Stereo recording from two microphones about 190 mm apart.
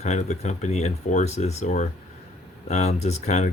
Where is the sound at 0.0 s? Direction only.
35° left (ahead or behind).